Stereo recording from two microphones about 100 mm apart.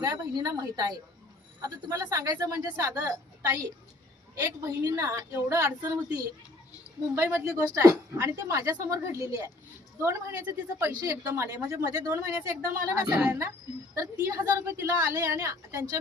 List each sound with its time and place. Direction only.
0.0 s a woman's voice: 40° right (ahead or behind)
7.2 s a woman's voice: 30° right (ahead or behind)